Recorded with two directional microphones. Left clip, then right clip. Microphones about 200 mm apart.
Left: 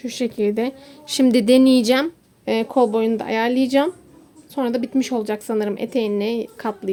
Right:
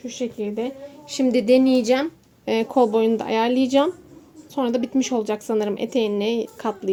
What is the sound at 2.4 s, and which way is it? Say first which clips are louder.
A woman's voice: left 1 dB; 15° left (ahead or behind).